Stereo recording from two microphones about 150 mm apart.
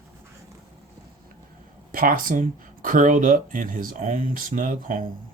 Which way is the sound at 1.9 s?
70° right (ahead or behind).